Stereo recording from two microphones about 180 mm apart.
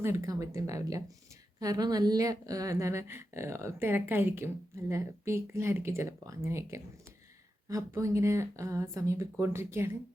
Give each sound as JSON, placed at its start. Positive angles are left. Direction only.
{"t": 0.0, "sound": "speech", "side_deg": -15}